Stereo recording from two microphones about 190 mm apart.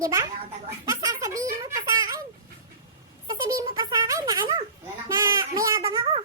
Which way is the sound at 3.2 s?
20° right (ahead or behind).